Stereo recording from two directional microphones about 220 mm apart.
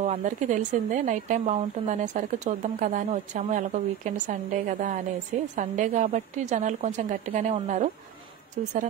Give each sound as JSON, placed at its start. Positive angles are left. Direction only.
{"t": 0.0, "sound": "speech", "side_deg": -30}